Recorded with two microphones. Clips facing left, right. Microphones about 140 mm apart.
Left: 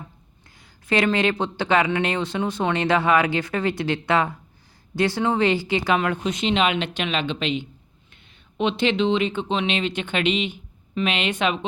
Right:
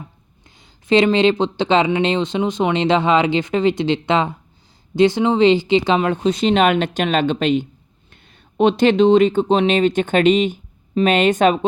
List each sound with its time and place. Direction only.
0.5 s speech: 20° right (ahead or behind); by 11.6 s 45° right (ahead or behind)